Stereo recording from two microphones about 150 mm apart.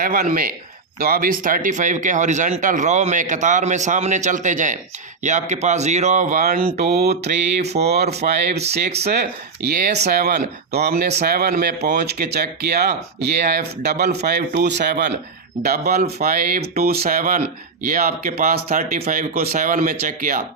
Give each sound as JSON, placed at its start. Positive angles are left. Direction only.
{"t": 0.0, "sound": "speech", "side_deg": -70}
{"t": 6.7, "sound": "speech", "side_deg": -90}